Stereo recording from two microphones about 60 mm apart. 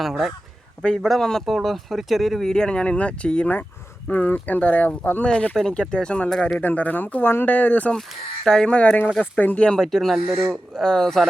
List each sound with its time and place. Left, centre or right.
0.0 s speech: centre
5.5 s speech: centre; by 7.9 s left
8.4 s speech: centre
9.4 s speech: left
9.6 s speech: centre